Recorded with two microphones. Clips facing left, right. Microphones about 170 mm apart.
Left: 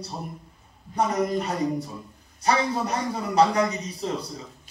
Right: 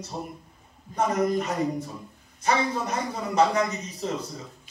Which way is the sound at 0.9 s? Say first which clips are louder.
Even; 35° left (ahead or behind).